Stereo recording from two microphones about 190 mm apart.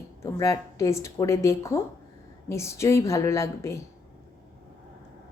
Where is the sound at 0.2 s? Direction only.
15° left (ahead or behind).